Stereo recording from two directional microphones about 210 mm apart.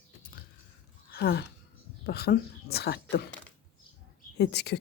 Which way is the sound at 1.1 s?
50° left (ahead or behind).